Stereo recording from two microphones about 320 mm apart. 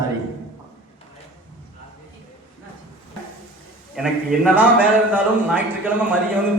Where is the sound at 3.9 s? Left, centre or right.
Centre.